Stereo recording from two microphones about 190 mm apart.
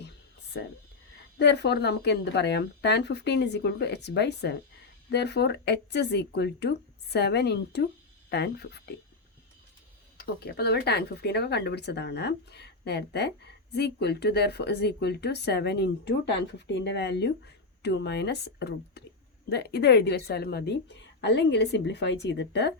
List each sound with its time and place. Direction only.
0.5 s speech: 65° left (ahead or behind)
10.2 s speech: 55° left (ahead or behind)